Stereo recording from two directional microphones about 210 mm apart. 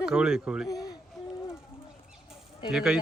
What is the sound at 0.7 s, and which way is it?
Speech, 15° left (ahead or behind).